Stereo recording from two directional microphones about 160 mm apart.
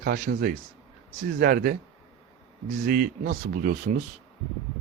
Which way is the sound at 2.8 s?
60° right (ahead or behind).